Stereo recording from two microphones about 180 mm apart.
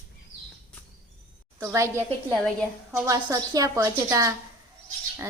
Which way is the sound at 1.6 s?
15° right (ahead or behind).